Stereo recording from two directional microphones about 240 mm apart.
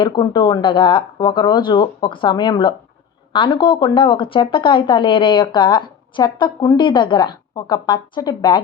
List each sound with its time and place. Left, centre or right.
0.0 s speech: centre